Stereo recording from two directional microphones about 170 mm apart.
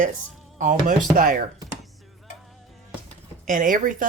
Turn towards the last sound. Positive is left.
turn(degrees=-50)  # may be behind; listen again after turning